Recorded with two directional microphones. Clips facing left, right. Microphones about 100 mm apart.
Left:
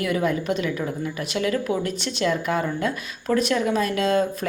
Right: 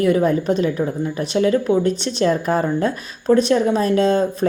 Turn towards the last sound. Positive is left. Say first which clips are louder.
# right 5 dB
turn(degrees=-30)  # may be behind; listen again after turning